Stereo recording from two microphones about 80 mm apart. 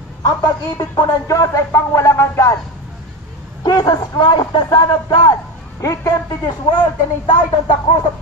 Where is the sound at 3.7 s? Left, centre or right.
Left.